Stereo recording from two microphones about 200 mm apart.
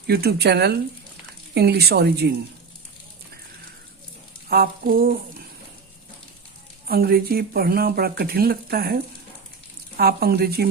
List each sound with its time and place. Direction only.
0.1 s speech: 50° right (ahead or behind)
4.4 s a sound: 50° right (ahead or behind)
6.8 s speech: 50° right (ahead or behind)
10.0 s speech: 50° right (ahead or behind)